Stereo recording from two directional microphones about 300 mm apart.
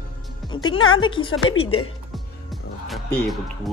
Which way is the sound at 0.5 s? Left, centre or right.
Centre.